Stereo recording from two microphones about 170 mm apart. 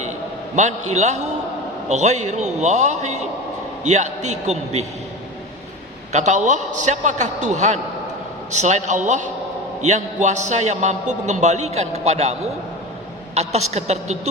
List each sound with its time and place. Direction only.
0.5 s a man's voice: 45° right (ahead or behind)
6.1 s a man's voice: 45° right (ahead or behind)